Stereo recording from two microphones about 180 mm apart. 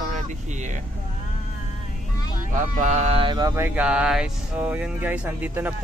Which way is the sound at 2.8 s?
40° right (ahead or behind).